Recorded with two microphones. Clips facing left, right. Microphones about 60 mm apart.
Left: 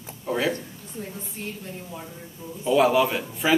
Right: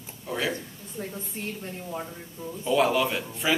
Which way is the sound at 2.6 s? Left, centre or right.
Centre.